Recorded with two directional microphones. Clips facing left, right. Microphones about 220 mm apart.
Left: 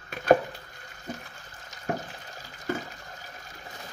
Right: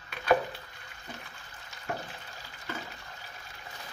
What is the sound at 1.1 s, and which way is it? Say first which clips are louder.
Water: left 7 dB; 45° left (ahead or behind).